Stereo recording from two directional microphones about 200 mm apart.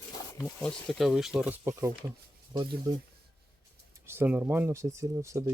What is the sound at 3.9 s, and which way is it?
Speech, 10° right (ahead or behind).